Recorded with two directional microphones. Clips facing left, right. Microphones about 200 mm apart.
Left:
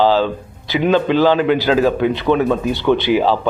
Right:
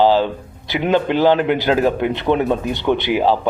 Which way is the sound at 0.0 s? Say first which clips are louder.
Even; 15° right (ahead or behind).